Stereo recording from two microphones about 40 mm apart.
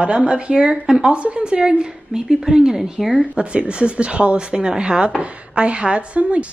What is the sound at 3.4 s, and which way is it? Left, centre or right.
Speech, right.